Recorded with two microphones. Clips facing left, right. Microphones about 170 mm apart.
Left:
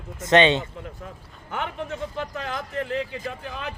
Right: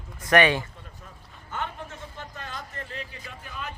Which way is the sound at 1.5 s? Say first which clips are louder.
Left 5 dB; 70° left (ahead or behind).